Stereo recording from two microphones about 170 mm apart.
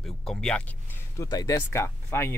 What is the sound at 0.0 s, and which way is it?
Speech, centre (ahead or behind).